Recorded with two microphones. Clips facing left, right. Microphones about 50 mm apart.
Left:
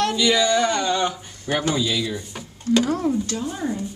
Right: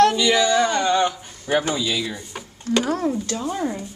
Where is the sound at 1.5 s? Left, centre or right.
Centre.